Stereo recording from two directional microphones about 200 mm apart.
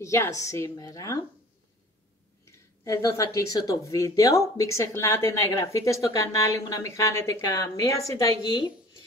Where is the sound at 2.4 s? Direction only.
15° left (ahead or behind).